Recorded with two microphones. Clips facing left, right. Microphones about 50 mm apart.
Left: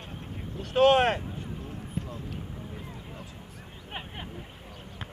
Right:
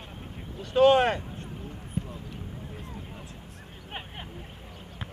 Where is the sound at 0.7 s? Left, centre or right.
Centre.